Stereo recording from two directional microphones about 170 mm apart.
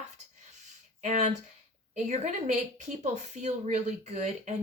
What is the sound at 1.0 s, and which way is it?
A woman's voice, 45° right (ahead or behind).